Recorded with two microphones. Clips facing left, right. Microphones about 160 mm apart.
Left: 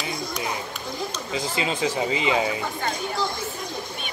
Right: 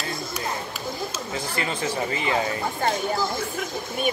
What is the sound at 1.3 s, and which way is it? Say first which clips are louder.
Speech: left 3 dB; 15° left (ahead or behind).